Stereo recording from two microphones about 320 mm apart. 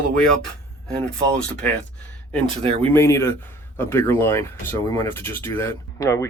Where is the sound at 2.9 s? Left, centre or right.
Centre.